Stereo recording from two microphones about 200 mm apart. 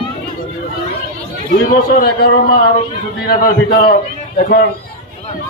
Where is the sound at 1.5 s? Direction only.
50° left (ahead or behind).